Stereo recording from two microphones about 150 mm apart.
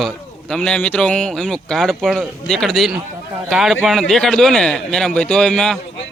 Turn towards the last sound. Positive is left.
turn(degrees=5)  # may be behind; listen again after turning